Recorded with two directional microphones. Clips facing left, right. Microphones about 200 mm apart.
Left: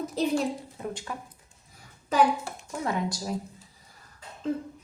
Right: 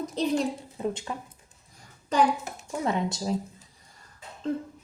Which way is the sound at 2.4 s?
20° right (ahead or behind).